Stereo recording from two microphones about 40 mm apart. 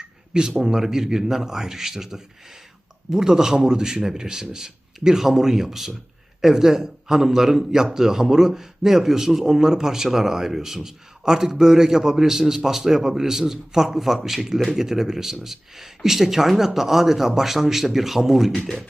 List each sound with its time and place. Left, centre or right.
0.6 s a man's voice: centre